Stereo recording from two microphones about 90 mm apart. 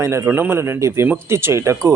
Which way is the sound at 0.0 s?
30° right (ahead or behind).